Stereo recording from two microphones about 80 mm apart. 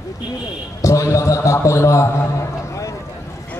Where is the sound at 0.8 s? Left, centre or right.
Left.